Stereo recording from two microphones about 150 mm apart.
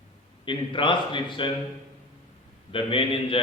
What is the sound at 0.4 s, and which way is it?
A man's voice, 35° left (ahead or behind).